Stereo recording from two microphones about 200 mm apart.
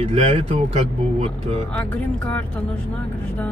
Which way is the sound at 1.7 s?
5° left (ahead or behind).